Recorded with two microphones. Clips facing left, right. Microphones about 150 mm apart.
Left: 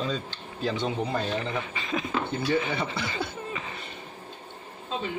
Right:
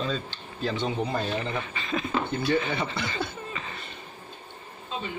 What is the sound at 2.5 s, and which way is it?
Chuckle, 15° left (ahead or behind).